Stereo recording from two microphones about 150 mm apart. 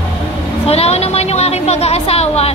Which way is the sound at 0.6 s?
45° left (ahead or behind).